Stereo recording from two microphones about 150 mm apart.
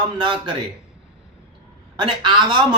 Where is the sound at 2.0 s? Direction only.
30° right (ahead or behind).